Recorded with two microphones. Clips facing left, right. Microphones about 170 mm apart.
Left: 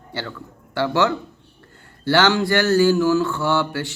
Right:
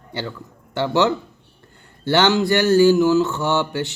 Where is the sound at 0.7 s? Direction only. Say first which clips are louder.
Right 1 dB; 20° right (ahead or behind).